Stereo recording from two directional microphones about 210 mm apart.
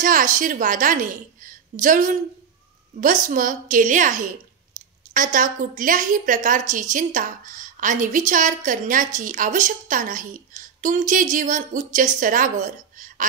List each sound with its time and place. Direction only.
0.0 s a woman's voice: 40° right (ahead or behind)